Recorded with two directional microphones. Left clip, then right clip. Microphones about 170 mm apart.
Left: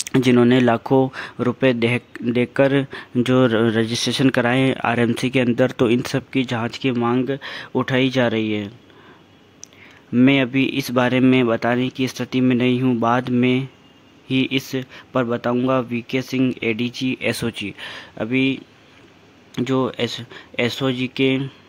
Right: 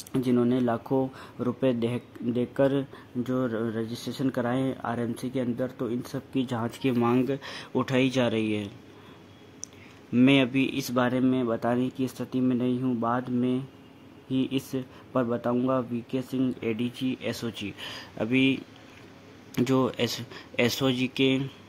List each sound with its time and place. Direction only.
0.1 s speech: 25° left (ahead or behind)
6.3 s speech: 10° left (ahead or behind)
10.1 s speech: 15° left (ahead or behind)
16.6 s speech: 25° left (ahead or behind); by 21.5 s 10° left (ahead or behind)